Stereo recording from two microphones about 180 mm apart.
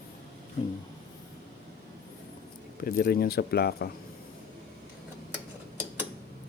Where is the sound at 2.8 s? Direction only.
55° left (ahead or behind).